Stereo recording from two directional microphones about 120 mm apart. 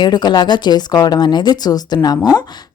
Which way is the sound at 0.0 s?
35° left (ahead or behind).